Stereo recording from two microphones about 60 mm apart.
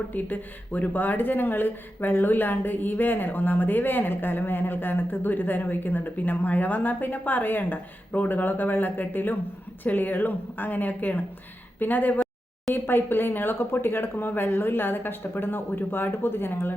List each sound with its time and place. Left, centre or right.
0.1 s speech: left